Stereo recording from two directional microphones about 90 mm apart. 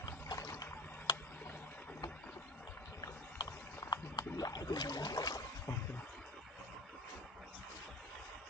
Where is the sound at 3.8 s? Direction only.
45° left (ahead or behind).